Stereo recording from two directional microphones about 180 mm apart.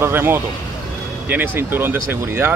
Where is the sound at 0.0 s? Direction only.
15° right (ahead or behind).